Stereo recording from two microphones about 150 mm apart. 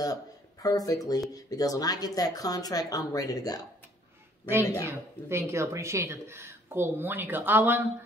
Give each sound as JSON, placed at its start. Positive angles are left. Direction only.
{"t": 0.0, "sound": "speech", "side_deg": 25}
{"t": 4.8, "sound": "speech", "side_deg": -20}